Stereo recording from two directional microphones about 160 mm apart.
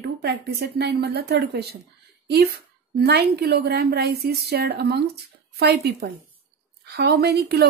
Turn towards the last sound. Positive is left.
turn(degrees=-85)